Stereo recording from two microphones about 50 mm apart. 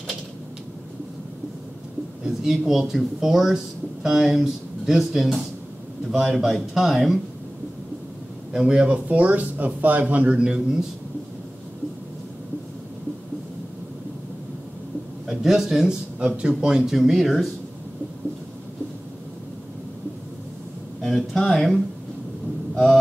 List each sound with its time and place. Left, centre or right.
2.2 s speech: centre
8.5 s speech: centre
8.9 s speech: right
10.3 s speech: centre
15.2 s a man's voice: centre
16.2 s speech: centre
21.0 s speech: centre